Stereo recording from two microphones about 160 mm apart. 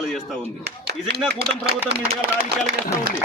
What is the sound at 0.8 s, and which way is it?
Speech, 85° right.